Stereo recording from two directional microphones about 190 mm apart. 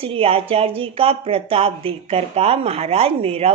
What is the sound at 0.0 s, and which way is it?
Speech, 30° right (ahead or behind).